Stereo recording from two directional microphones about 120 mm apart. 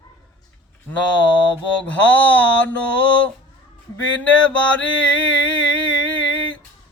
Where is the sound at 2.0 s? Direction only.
15° left (ahead or behind).